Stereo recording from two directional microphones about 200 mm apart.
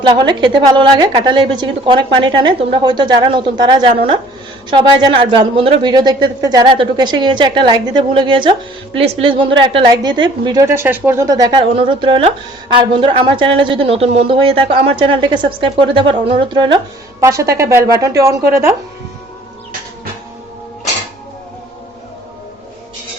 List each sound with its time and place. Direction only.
0.0 s a woman's voice: 20° right (ahead or behind)